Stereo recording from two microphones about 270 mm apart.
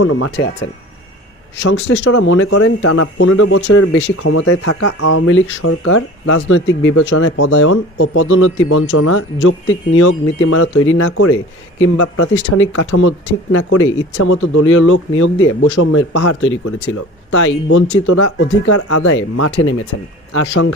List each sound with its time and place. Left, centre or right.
0.0 s speech: left
1.6 s speech: left